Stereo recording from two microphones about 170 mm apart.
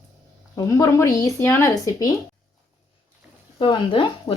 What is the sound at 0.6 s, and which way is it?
Speech, 20° left (ahead or behind).